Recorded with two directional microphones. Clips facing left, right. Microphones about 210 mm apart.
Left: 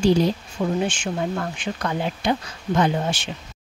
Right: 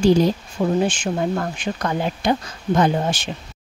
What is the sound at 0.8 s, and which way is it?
Speech, 40° right (ahead or behind).